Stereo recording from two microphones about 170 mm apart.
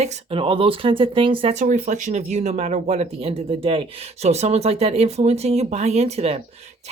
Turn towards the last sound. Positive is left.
turn(degrees=-40)  # may be behind; listen again after turning